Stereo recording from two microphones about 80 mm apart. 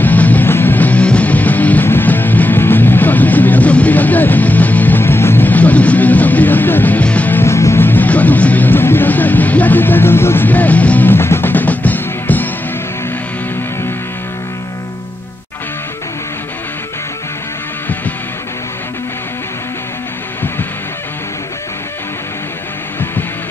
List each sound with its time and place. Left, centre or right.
0.0 s music: centre
7.4 s music: left